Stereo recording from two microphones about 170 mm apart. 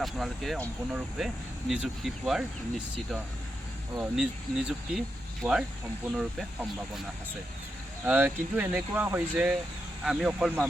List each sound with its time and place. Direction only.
0.0 s speech: centre (ahead or behind)
8.0 s speech: 10° right (ahead or behind)